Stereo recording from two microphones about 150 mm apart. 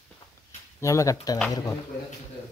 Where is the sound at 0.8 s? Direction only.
20° left (ahead or behind).